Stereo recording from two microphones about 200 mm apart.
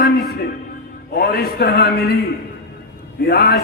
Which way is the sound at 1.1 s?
50° left (ahead or behind).